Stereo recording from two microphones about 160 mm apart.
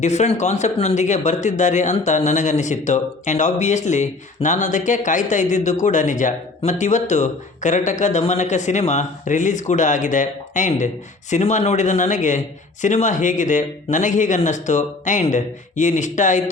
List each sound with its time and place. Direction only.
0.0 s speech: 45° left (ahead or behind)